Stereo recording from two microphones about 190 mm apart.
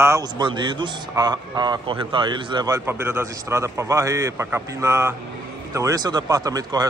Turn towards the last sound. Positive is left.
turn(degrees=-20)  # may be behind; listen again after turning